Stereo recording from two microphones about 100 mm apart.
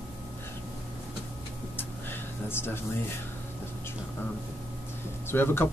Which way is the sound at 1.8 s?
20° left (ahead or behind).